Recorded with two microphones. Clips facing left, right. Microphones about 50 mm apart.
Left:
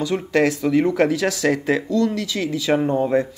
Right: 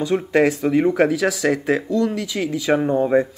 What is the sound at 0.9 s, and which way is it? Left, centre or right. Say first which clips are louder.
Speech: right 1 dB; centre.